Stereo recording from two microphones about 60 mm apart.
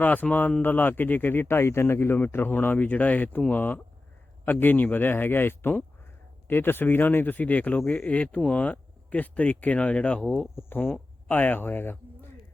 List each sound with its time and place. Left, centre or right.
0.0 s speech: left; by 10.5 s centre
10.5 s speech: left
11.3 s speech: left